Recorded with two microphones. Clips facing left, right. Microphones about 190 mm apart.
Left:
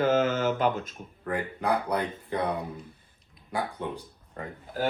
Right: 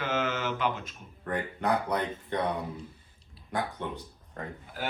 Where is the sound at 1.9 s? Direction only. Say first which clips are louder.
Left 1 dB; 10° left (ahead or behind).